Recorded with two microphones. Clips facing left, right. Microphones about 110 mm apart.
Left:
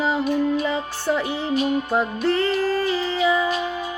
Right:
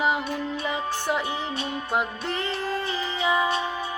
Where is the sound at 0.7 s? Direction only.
15° right (ahead or behind).